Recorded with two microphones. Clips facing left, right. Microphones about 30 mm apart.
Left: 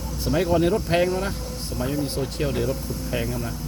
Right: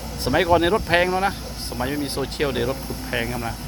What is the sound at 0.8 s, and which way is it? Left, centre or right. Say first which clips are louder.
Speech: right 3 dB; right.